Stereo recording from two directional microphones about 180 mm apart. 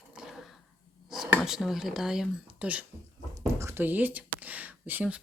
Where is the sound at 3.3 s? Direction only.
15° right (ahead or behind).